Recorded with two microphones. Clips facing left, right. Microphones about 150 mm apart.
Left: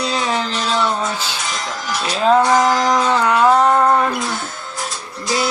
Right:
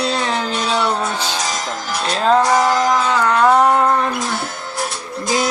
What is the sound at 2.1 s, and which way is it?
Music, 5° left (ahead or behind).